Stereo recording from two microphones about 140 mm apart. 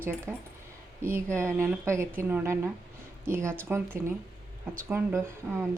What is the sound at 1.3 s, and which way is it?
A woman's voice, 20° right (ahead or behind).